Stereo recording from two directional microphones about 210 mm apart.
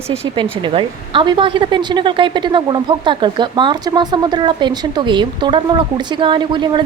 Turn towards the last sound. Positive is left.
turn(degrees=-20)  # may be behind; listen again after turning